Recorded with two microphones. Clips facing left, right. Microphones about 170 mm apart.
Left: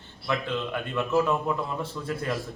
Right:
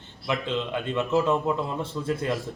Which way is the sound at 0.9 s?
20° right (ahead or behind).